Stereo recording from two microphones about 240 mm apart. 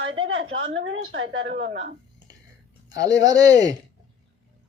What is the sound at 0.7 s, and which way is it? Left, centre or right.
Speech, right.